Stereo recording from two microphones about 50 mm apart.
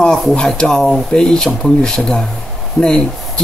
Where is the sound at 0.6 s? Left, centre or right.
Centre.